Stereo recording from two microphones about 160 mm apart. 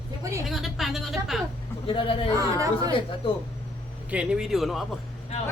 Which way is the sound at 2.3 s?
20° right (ahead or behind).